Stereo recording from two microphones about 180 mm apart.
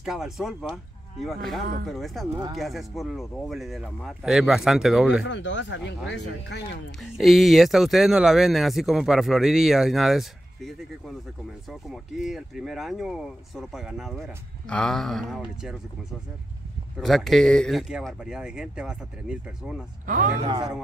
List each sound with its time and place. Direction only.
0.0 s speech: centre (ahead or behind)
5.2 s speech: 90° left
7.0 s speech: centre (ahead or behind)
11.9 s speech: 5° right (ahead or behind)
20.1 s speech: 45° right (ahead or behind)